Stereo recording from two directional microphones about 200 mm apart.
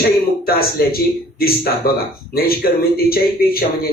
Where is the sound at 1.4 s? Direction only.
50° left (ahead or behind).